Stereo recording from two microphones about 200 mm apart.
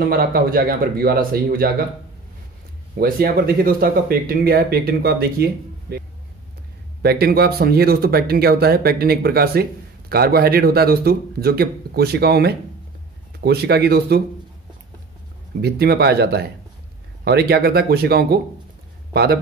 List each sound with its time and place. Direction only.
0.0 s speech: 50° right (ahead or behind)
3.0 s speech: 45° right (ahead or behind)
15.6 s speech: 55° right (ahead or behind)